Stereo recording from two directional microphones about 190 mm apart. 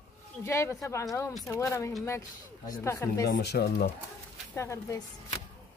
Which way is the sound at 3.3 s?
55° left (ahead or behind).